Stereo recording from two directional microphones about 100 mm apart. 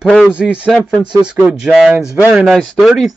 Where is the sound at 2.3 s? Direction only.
5° right (ahead or behind).